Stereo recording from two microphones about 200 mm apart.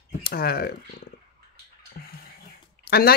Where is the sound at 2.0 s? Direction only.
50° left (ahead or behind).